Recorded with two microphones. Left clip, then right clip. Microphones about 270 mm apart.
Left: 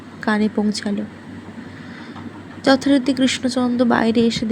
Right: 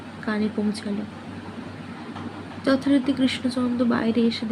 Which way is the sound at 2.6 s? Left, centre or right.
Left.